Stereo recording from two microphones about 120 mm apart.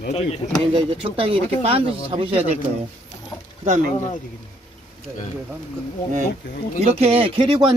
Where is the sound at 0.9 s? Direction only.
50° right (ahead or behind).